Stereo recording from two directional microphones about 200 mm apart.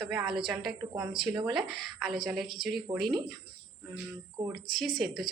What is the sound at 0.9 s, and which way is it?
Speech, 15° right (ahead or behind).